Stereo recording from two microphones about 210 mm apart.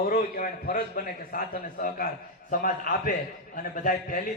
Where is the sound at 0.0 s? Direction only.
45° left (ahead or behind).